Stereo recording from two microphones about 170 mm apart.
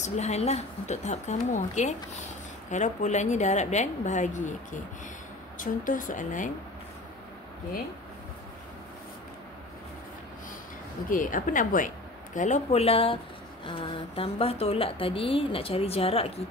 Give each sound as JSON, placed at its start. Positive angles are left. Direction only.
{"t": 0.0, "sound": "a woman's voice", "side_deg": 40}
{"t": 11.1, "sound": "a woman's voice", "side_deg": 50}